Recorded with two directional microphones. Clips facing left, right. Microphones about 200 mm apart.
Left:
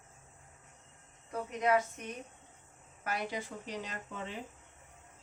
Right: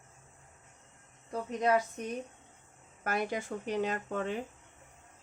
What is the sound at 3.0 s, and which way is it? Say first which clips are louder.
Speech: right 4 dB; 50° right (ahead or behind).